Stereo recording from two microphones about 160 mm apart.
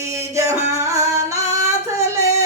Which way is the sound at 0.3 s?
20° right (ahead or behind).